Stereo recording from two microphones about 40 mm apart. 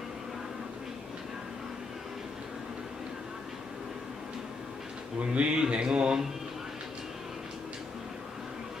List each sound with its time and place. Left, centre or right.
5.2 s mantra: right